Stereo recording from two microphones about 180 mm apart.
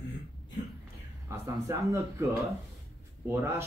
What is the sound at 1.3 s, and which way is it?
Speech, 15° right (ahead or behind).